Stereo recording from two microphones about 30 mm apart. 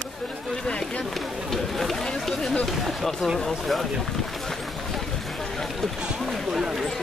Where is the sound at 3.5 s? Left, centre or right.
Centre.